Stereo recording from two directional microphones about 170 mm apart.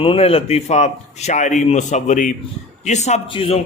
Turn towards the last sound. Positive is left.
turn(degrees=35)  # may be behind; listen again after turning